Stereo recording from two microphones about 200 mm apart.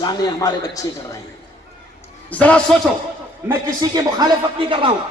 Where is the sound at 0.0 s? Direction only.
20° left (ahead or behind).